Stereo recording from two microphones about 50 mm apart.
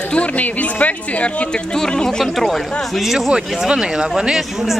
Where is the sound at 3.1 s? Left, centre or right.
Centre.